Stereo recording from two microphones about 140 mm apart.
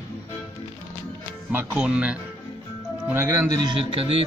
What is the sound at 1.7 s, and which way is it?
Speech, 5° right (ahead or behind).